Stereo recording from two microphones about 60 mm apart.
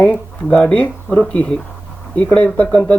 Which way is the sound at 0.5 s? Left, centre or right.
Left.